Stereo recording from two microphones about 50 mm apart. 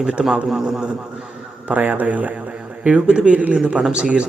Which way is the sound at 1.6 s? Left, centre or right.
Right.